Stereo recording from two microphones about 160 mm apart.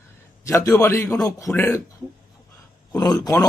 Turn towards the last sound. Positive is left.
turn(degrees=25)  # may be behind; listen again after turning